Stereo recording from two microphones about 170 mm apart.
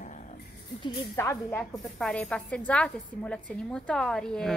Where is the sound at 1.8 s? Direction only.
Centre (ahead or behind).